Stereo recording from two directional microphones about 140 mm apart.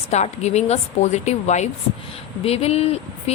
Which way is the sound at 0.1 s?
50° left (ahead or behind).